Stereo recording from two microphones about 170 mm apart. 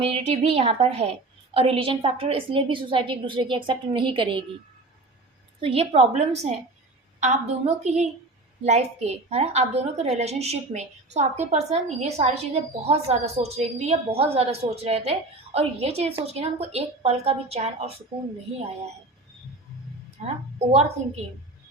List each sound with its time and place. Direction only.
0.0 s a woman's voice: 35° right (ahead or behind)
5.5 s a woman's voice: 35° right (ahead or behind)
20.2 s a woman's voice: 40° right (ahead or behind)